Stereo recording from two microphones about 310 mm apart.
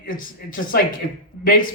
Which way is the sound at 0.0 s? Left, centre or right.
Left.